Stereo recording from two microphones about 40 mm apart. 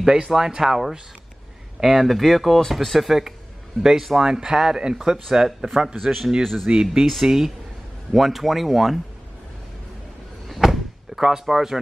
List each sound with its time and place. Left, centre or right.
0.0 s speech: right
4.2 s speech: centre
6.4 s speech: centre
6.7 s speech: centre
10.6 s door: centre